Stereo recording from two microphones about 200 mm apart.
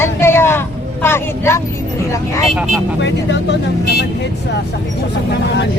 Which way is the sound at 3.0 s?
60° left (ahead or behind).